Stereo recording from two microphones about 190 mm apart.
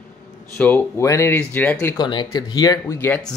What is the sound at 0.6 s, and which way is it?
Speech, 10° left (ahead or behind).